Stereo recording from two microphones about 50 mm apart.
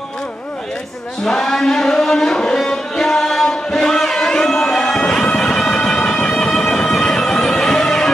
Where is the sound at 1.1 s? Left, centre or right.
Centre.